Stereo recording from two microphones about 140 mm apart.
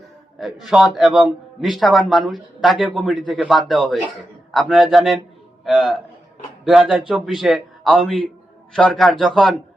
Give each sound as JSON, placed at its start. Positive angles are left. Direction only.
{"t": 0.3, "sound": "a man's voice", "side_deg": 0}